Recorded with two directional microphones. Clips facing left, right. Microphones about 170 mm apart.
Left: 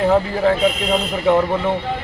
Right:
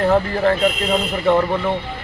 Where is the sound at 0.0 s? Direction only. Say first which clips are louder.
Left 1 dB; 5° left (ahead or behind).